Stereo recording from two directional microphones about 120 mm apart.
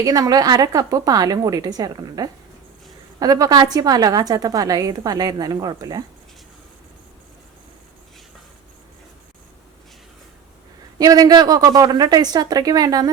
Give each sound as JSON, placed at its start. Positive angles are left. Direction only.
{"t": 0.0, "sound": "a woman's voice", "side_deg": -30}
{"t": 10.9, "sound": "a woman's voice", "side_deg": -30}